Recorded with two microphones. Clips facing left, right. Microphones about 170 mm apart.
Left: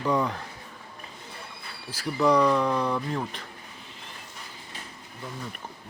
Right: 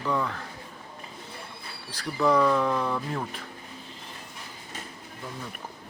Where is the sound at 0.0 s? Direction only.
15° left (ahead or behind).